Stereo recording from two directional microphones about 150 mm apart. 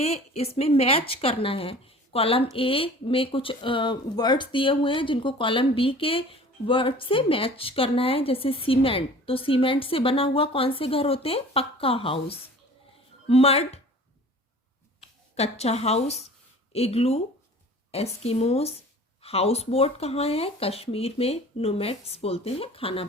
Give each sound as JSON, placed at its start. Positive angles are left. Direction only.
{"t": 0.0, "sound": "a woman's voice", "side_deg": 45}
{"t": 15.4, "sound": "a woman's voice", "side_deg": 45}